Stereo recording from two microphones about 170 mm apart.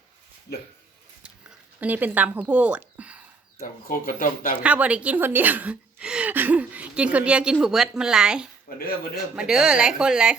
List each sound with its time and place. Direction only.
1.2 s a sound: 5° right (ahead or behind)
3.6 s speech: 55° left (ahead or behind)
4.6 s speech: 10° right (ahead or behind)
8.7 s speech: 60° left (ahead or behind)
9.3 s a woman's voice: 5° right (ahead or behind)